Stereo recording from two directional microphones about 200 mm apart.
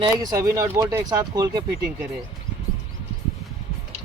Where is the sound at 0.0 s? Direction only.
20° right (ahead or behind).